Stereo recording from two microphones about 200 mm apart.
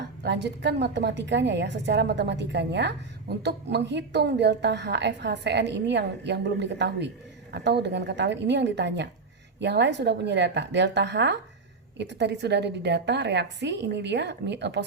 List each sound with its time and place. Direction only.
0.2 s a woman's voice: 60° right (ahead or behind)